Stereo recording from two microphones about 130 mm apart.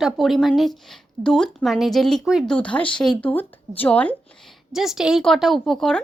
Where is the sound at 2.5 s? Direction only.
10° left (ahead or behind).